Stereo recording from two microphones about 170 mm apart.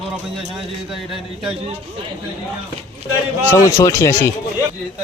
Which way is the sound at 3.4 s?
15° left (ahead or behind).